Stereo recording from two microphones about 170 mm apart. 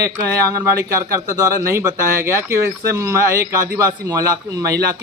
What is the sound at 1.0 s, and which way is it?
A man's voice, 20° right (ahead or behind).